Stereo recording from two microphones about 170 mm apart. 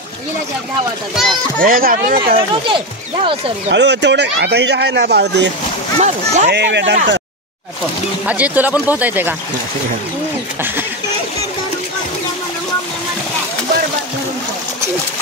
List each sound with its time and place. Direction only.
1.1 s a child's voice: centre (ahead or behind)
1.6 s speech: 55° right (ahead or behind)
3.7 s speech: 90° right
5.9 s speech: 40° right (ahead or behind)
6.5 s speech: 90° right
8.3 s speech: 10° right (ahead or behind)